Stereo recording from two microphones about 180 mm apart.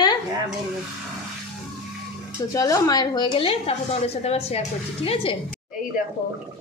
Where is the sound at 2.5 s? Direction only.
20° left (ahead or behind).